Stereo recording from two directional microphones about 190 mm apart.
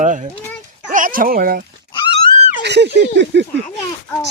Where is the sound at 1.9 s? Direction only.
25° left (ahead or behind).